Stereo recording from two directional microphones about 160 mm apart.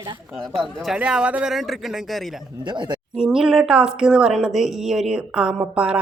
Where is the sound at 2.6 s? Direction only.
30° right (ahead or behind).